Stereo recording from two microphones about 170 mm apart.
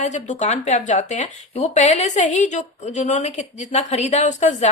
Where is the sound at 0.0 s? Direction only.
45° left (ahead or behind).